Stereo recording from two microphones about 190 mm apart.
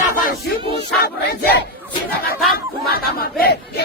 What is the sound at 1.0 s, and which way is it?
Battle cry, 55° left (ahead or behind).